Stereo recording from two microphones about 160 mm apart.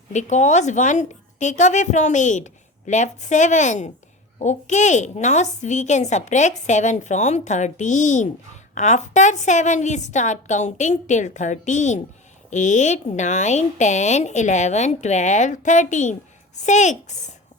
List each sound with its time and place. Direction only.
0.1 s a woman's voice: 45° left (ahead or behind)